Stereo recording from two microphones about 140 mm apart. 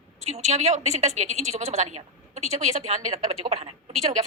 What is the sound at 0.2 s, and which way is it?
A woman's voice, 50° right (ahead or behind).